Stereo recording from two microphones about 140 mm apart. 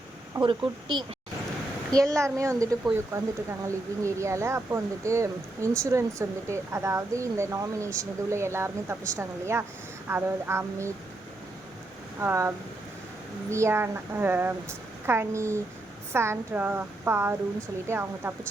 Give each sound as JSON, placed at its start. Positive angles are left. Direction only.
{"t": 0.3, "sound": "a woman's voice", "side_deg": -35}
{"t": 12.2, "sound": "a woman's voice", "side_deg": -15}